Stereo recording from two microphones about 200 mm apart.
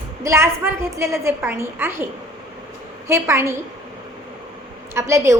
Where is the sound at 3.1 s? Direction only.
15° right (ahead or behind).